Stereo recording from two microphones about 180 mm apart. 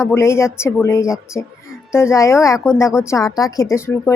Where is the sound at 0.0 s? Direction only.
15° left (ahead or behind).